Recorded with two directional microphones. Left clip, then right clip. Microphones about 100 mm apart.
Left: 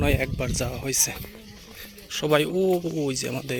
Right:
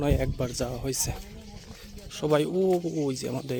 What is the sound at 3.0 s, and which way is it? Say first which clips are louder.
Speech: left 2 dB; 25° right (ahead or behind).